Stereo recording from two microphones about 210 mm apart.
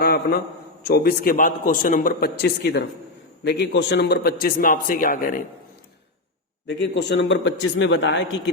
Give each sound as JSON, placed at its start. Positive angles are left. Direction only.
{"t": 0.0, "sound": "a man's voice", "side_deg": 45}
{"t": 6.7, "sound": "a man's voice", "side_deg": 55}